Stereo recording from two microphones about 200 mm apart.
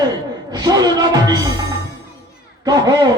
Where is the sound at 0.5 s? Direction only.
20° right (ahead or behind).